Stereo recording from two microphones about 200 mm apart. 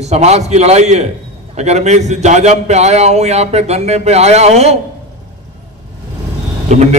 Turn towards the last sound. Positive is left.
turn(degrees=-35)  # may be behind; listen again after turning